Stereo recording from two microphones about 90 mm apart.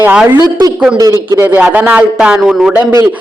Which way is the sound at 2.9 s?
40° right (ahead or behind).